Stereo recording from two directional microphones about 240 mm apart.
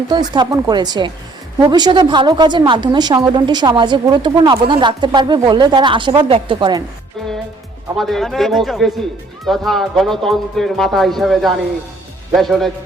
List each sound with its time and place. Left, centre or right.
0.1 s a woman's voice: centre
7.9 s speech: centre